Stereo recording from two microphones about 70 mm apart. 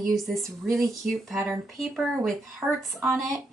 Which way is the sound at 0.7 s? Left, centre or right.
Centre.